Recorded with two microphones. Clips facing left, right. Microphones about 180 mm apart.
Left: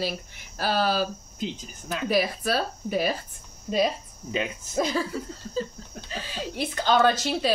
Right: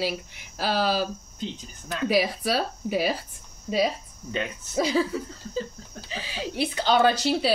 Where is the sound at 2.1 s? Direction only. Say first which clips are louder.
Right 1 dB; 10° right (ahead or behind).